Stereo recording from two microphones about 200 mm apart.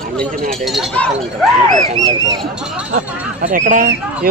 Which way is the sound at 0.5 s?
Centre (ahead or behind).